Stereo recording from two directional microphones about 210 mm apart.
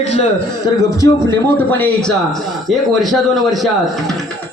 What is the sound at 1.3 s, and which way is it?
A man's voice, 10° left (ahead or behind).